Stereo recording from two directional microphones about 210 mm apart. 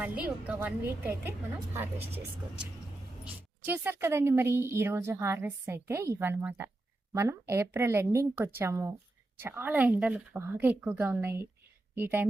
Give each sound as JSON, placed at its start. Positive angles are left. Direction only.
{"t": 0.0, "sound": "speech", "side_deg": -5}